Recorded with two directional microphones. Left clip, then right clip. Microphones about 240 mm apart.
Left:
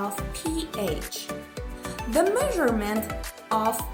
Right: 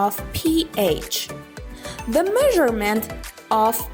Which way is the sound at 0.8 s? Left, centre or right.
Right.